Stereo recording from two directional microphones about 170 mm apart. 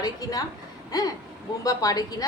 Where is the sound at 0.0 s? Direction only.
20° left (ahead or behind).